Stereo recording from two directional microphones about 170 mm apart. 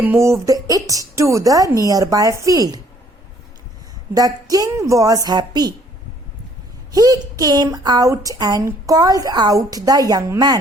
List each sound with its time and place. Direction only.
0.0 s a woman's voice: 15° right (ahead or behind)
4.1 s a woman's voice: 20° right (ahead or behind)
6.9 s a woman's voice: 20° right (ahead or behind)